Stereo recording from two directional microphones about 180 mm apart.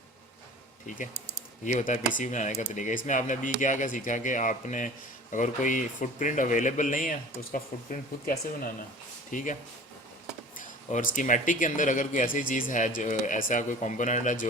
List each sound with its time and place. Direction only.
0.9 s speech: 45° left (ahead or behind)
10.9 s speech: 45° left (ahead or behind)